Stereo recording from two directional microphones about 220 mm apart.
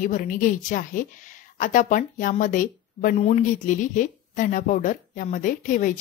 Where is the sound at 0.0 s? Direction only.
35° left (ahead or behind).